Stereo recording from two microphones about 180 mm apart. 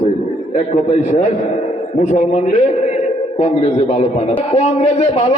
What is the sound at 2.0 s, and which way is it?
Speech, 45° left (ahead or behind).